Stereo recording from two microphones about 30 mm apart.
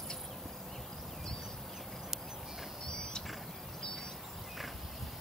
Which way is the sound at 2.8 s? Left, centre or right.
Left.